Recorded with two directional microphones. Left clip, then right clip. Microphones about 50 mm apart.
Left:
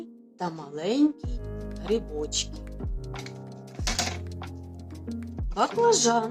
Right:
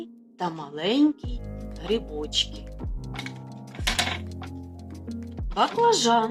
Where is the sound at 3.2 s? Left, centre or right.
Left.